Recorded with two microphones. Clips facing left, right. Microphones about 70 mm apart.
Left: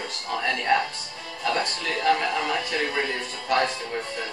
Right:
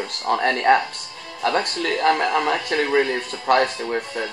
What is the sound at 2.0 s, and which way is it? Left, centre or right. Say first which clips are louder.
Speech: right 4 dB; right.